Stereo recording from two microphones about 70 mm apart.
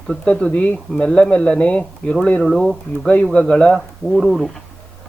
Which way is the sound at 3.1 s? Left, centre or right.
Centre.